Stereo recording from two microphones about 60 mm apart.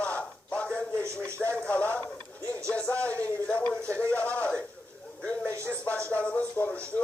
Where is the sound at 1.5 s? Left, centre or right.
Left.